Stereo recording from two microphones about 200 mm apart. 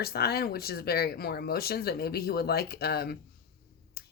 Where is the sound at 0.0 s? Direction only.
50° left (ahead or behind).